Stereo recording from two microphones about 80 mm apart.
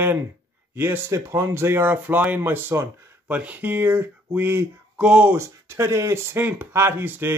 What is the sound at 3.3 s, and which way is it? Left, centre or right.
Speech, centre.